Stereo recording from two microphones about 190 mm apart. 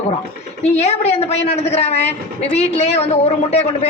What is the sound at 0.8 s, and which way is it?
A man's voice, 35° left (ahead or behind).